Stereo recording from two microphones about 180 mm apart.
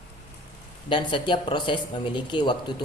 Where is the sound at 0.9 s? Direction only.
25° left (ahead or behind).